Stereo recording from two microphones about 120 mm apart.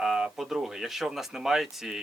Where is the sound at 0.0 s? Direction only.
5° right (ahead or behind).